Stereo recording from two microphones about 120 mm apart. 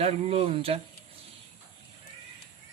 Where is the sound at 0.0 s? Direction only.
60° right (ahead or behind).